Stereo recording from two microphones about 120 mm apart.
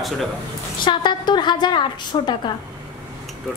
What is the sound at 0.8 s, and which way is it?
A woman's voice, 40° left (ahead or behind).